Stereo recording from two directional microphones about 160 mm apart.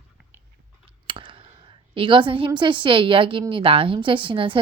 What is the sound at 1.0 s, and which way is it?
Clicking, 30° right (ahead or behind).